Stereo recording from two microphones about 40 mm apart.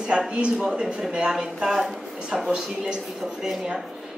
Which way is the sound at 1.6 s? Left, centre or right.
Centre.